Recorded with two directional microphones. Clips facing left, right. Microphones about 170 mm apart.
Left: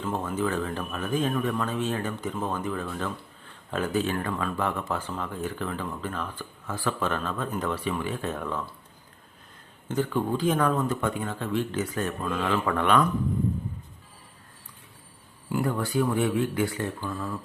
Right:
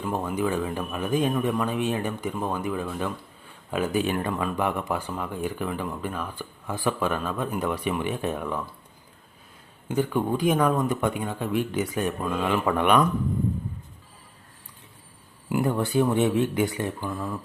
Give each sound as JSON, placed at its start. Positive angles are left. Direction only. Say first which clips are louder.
{"t": 0.0, "sound": "speech", "louder": "right 2 dB", "side_deg": -10}
{"t": 9.9, "sound": "speech", "louder": "right 2 dB", "side_deg": -10}
{"t": 15.4, "sound": "speech", "louder": "right 3 dB", "side_deg": -20}